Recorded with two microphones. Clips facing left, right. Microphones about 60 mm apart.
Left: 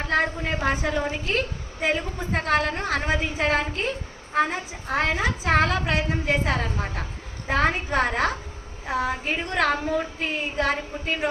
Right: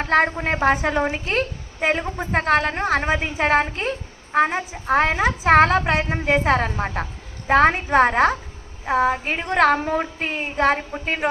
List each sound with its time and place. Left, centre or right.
0.0 s a woman's voice: right